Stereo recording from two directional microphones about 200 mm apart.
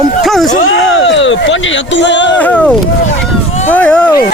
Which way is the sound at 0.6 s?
65° left (ahead or behind).